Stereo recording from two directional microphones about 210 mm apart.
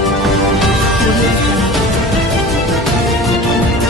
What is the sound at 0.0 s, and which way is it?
Music, centre (ahead or behind).